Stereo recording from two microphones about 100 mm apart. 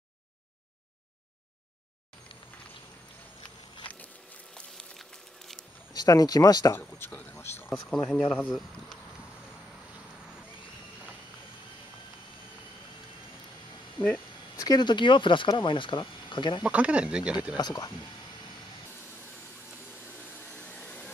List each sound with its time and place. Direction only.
4.6 s a sound: 5° left (ahead or behind)
5.9 s speech: 40° left (ahead or behind)
7.0 s speech: 20° left (ahead or behind)
7.7 s speech: 10° left (ahead or behind)
14.6 s speech: 45° left (ahead or behind)
16.6 s speech: 10° right (ahead or behind)
17.6 s speech: 40° left (ahead or behind)
20.5 s vacuum cleaner: 15° left (ahead or behind)